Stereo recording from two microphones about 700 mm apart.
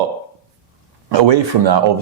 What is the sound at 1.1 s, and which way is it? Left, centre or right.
Speech, right.